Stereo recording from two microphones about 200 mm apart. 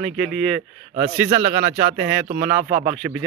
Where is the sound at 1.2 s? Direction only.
40° right (ahead or behind).